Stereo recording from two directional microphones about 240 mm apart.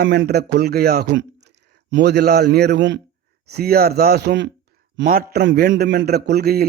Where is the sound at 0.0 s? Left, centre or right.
Right.